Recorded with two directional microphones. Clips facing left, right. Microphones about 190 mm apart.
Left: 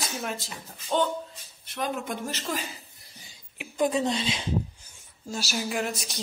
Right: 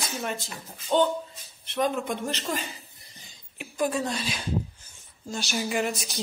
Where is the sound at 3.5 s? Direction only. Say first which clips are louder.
Left 2 dB; 20° left (ahead or behind).